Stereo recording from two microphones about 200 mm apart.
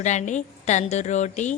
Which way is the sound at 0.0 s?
35° left (ahead or behind).